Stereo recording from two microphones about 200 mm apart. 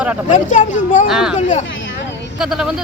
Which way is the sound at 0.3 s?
35° left (ahead or behind).